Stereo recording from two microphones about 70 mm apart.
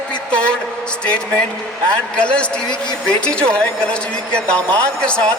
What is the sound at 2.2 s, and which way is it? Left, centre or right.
Speech, centre.